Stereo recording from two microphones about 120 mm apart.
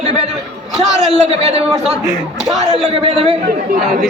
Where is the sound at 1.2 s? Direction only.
65° right (ahead or behind).